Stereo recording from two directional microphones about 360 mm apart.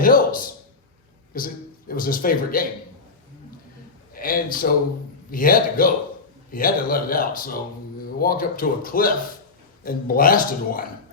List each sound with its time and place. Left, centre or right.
0.0 s a man's voice: left
4.1 s a man's voice: left